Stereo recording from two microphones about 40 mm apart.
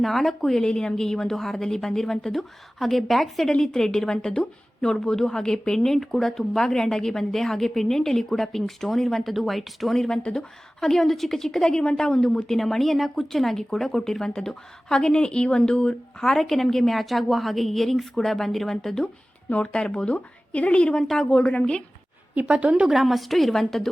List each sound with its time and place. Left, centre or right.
0.0 s a woman's voice: centre
0.5 s a woman's voice: centre
3.5 s a woman's voice: centre
10.3 s a woman's voice: centre
16.2 s a woman's voice: centre
19.6 s speech: left
20.1 s a woman's voice: left
21.0 s a woman's voice: centre
21.3 s speech: left
22.4 s a woman's voice: right
22.9 s a woman's voice: centre